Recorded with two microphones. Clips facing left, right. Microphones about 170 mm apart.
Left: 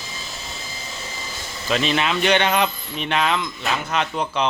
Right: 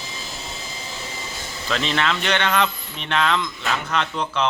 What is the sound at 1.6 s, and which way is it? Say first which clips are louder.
Speech: left 2 dB; 15° left (ahead or behind).